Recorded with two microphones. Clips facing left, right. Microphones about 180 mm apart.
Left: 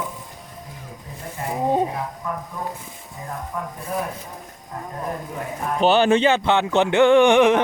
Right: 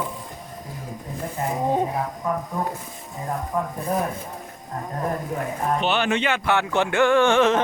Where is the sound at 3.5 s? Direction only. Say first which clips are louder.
Right 5 dB; 30° right (ahead or behind).